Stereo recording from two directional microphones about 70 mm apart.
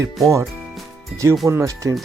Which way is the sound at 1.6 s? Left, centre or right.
Right.